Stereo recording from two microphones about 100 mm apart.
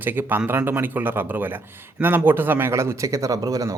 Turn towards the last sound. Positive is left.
turn(degrees=-35)  # may be behind; listen again after turning